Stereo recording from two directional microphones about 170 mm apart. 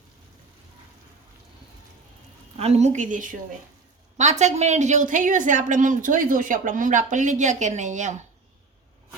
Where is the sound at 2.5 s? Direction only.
40° right (ahead or behind).